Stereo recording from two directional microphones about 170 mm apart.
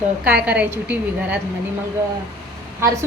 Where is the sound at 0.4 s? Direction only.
10° right (ahead or behind).